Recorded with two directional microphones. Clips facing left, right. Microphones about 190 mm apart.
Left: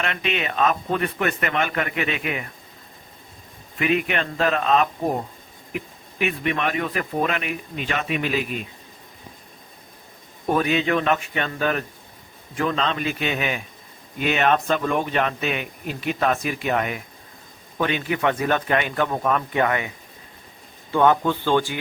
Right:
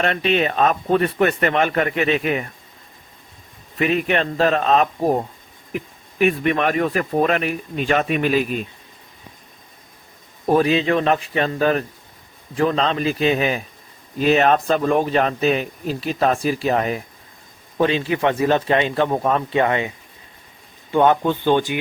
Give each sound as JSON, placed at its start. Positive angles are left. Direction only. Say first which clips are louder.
{"t": 0.0, "sound": "speech", "louder": "right 7 dB", "side_deg": -35}
{"t": 3.8, "sound": "speech", "louder": "right 3 dB", "side_deg": -35}
{"t": 6.1, "sound": "speech", "louder": "right 6 dB", "side_deg": -45}
{"t": 10.5, "sound": "a man's voice", "louder": "right 4 dB", "side_deg": -30}
{"t": 20.9, "sound": "a man's voice", "louder": "right 2 dB", "side_deg": -20}